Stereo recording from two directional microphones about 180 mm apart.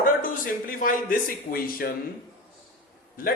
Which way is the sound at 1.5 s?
55° left (ahead or behind).